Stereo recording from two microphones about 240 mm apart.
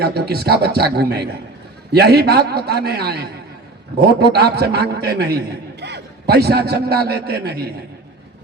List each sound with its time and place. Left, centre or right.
0.0 s a man's voice: right